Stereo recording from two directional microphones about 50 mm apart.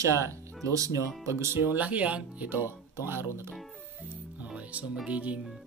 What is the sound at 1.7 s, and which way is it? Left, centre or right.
Speech, right.